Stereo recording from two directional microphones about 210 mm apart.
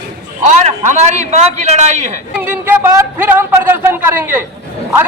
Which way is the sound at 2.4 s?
10° right (ahead or behind).